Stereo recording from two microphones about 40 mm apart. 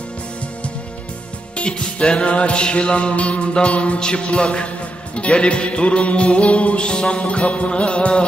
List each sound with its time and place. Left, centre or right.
1.6 s music: left